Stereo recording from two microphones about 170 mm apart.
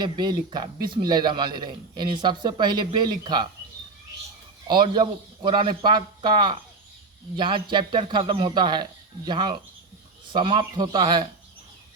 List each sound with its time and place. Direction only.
0.0 s a man's voice: 25° right (ahead or behind)
4.7 s a man's voice: 25° right (ahead or behind)